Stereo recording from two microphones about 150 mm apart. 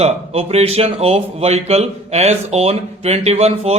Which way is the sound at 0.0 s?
45° right (ahead or behind).